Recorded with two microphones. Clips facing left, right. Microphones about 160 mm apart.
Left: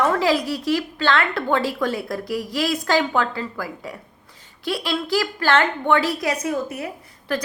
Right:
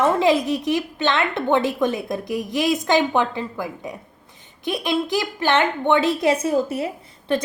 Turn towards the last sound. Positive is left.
turn(degrees=-25)  # may be behind; listen again after turning